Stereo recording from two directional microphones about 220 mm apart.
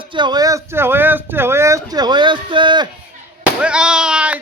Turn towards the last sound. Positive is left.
turn(degrees=-5)  # may be behind; listen again after turning